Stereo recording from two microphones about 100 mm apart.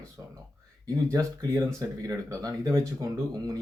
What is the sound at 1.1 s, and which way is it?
Speech, 30° right (ahead or behind).